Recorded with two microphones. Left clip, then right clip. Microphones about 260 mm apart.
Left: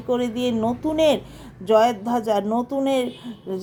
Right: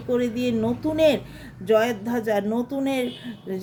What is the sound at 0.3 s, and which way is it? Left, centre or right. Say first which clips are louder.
Speech: left 2 dB; centre.